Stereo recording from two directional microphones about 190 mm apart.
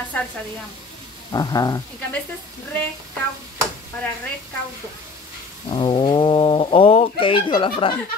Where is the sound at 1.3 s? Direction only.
20° left (ahead or behind).